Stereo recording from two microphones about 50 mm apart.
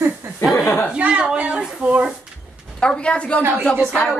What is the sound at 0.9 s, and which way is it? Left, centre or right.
Speech, right.